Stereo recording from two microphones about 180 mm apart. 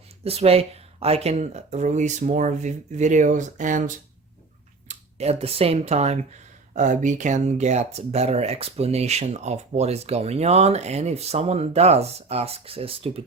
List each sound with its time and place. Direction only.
0.3 s speech: 35° right (ahead or behind)